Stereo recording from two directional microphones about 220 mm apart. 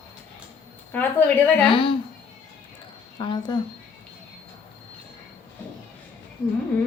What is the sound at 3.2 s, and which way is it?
Speech, 20° left (ahead or behind).